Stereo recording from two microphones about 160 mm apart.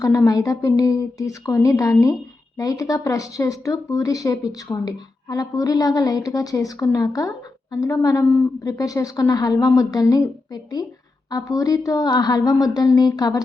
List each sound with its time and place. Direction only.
0.0 s speech: 20° left (ahead or behind)